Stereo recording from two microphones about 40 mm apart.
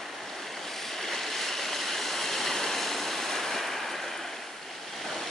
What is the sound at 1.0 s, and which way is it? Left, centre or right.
Stream, centre.